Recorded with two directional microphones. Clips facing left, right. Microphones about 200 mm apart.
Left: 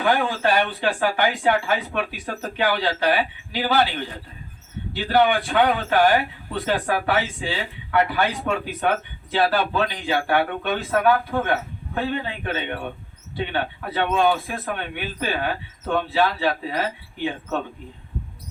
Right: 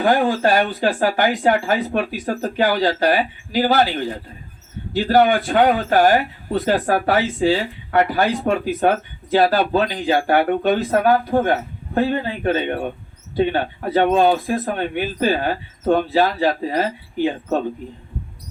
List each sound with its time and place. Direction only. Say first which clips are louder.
0.0 s speech: right 4 dB; 40° right (ahead or behind)
4.9 s speech: right 4 dB; 40° right (ahead or behind)